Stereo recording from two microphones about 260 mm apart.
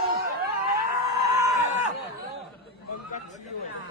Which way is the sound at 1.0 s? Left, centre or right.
Centre.